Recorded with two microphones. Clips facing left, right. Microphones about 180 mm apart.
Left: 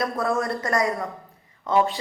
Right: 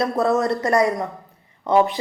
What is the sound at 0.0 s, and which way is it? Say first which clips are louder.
A woman's voice: right 5 dB; 25° right (ahead or behind).